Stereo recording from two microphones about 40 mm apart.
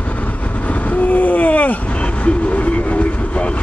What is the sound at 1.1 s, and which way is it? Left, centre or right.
Vehicle, left.